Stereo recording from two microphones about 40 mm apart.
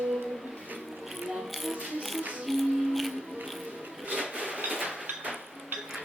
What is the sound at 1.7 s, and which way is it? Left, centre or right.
Music, right.